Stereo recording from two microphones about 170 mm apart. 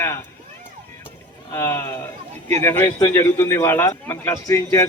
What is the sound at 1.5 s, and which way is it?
A man's voice, 15° left (ahead or behind).